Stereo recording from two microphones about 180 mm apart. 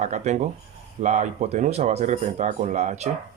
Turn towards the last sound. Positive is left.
turn(degrees=-40)  # may be behind; listen again after turning